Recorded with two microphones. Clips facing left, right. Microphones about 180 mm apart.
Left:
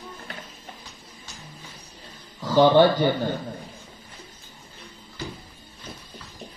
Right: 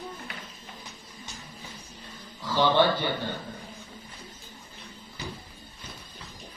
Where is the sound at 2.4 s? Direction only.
45° left (ahead or behind).